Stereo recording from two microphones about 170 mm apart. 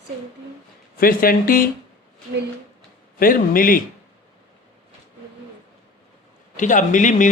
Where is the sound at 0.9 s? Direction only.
60° left (ahead or behind).